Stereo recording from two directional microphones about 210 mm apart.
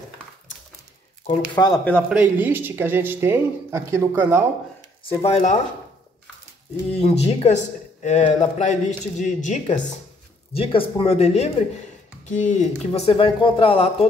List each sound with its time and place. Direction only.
1.5 s speech: 20° left (ahead or behind)
2.0 s speech: 5° right (ahead or behind)
5.0 s speech: 30° left (ahead or behind)
6.9 s speech: 30° left (ahead or behind)